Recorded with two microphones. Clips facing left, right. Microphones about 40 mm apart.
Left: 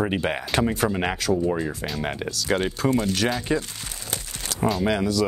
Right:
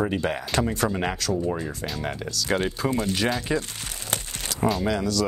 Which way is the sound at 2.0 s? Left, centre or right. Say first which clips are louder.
Left 2 dB; centre.